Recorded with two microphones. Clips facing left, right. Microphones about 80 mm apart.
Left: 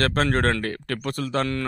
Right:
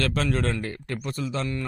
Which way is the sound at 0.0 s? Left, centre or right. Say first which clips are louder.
Left 4 dB; left.